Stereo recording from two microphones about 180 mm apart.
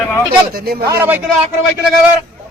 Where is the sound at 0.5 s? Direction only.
60° right (ahead or behind).